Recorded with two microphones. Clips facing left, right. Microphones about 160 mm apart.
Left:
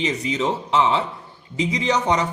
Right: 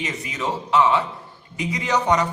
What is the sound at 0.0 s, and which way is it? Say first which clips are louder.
A man's voice: left 5 dB; 25° left (ahead or behind).